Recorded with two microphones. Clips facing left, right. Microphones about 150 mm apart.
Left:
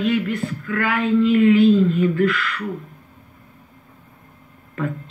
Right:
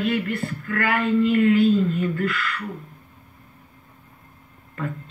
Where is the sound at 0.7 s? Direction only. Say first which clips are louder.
Left 2 dB; 45° right (ahead or behind).